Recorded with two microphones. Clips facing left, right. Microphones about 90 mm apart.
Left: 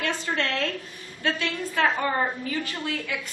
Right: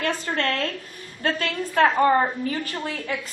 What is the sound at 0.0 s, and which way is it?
A woman's voice, 45° right (ahead or behind).